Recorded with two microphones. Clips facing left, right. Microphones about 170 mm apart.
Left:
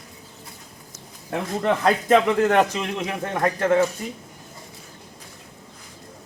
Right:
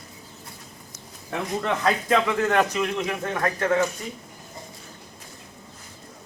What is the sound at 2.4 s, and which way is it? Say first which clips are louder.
Speech: left 2 dB; 25° left (ahead or behind).